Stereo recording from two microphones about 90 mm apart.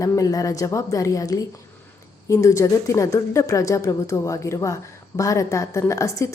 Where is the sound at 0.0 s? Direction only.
40° left (ahead or behind).